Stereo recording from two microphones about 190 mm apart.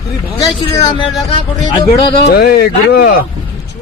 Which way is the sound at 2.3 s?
55° left (ahead or behind).